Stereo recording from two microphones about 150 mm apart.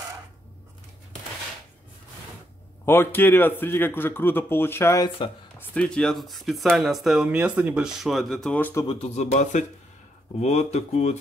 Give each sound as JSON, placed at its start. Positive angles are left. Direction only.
{"t": 2.8, "sound": "a man's voice", "side_deg": 15}
{"t": 5.6, "sound": "speech", "side_deg": 5}
{"t": 8.9, "sound": "speech", "side_deg": 45}